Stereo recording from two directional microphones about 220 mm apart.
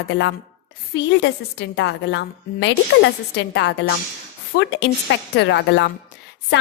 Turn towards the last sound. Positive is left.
turn(degrees=50)  # may be behind; listen again after turning